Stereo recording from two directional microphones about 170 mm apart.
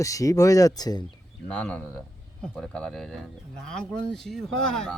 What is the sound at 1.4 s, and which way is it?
Speech, 5° left (ahead or behind).